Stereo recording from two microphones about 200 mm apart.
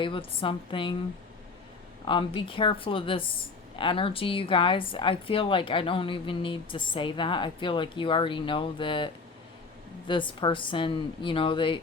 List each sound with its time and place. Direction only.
0.0 s a woman's voice: 25° left (ahead or behind)
2.0 s a woman's voice: 25° left (ahead or behind)